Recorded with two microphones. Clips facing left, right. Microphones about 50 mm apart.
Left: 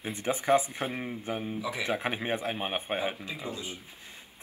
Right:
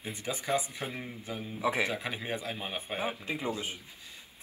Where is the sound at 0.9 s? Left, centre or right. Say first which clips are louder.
Left 5 dB; left.